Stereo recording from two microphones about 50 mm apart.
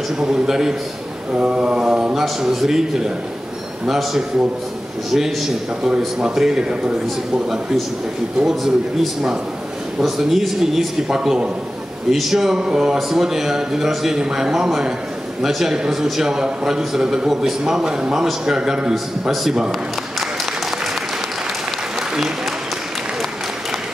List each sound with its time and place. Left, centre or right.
0.2 s a man's voice: centre
11.1 s a man's voice: centre